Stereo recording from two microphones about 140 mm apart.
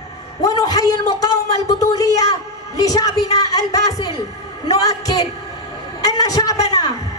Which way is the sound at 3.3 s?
25° left (ahead or behind).